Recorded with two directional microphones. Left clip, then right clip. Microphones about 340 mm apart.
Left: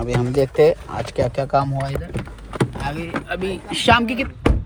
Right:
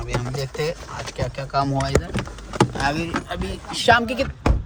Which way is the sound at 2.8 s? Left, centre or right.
Centre.